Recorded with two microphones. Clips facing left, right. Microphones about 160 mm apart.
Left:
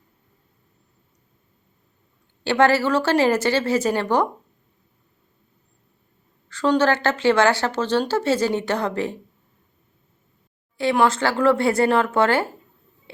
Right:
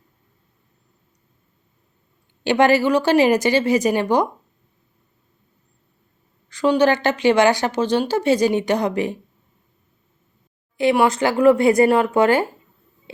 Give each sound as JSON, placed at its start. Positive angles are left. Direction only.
{"t": 2.4, "sound": "speech", "side_deg": -15}
{"t": 6.5, "sound": "speech", "side_deg": -15}
{"t": 10.8, "sound": "speech", "side_deg": -15}